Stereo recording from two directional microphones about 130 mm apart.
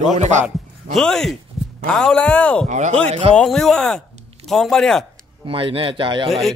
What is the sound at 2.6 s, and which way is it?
Speech, 65° right (ahead or behind).